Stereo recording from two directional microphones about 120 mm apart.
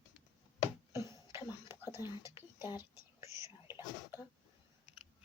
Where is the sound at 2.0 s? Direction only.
25° right (ahead or behind).